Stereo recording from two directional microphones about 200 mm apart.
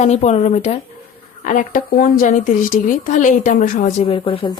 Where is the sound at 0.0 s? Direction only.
35° left (ahead or behind).